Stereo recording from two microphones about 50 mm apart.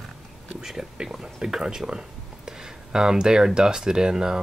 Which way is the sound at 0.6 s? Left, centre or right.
Centre.